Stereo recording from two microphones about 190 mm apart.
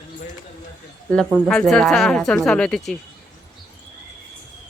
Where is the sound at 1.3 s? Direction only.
Centre (ahead or behind).